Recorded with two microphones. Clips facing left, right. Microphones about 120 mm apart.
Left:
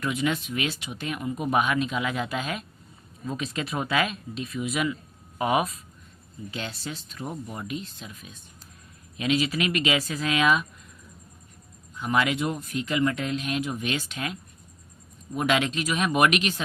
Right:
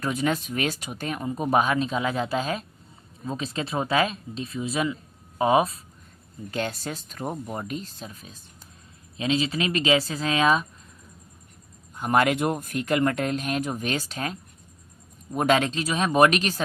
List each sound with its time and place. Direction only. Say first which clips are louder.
0.0 s speech: right 1 dB; 40° right (ahead or behind)
6.5 s speech: right 6 dB; 45° right (ahead or behind)
11.9 s speech: right 3 dB; 45° right (ahead or behind)